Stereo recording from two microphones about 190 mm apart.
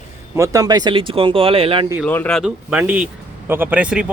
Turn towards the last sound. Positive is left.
turn(degrees=-5)  # may be behind; listen again after turning